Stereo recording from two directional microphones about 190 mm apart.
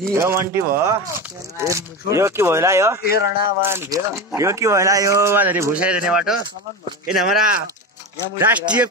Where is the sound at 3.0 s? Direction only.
55° left (ahead or behind).